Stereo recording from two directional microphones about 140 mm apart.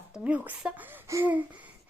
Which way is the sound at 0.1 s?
5° right (ahead or behind).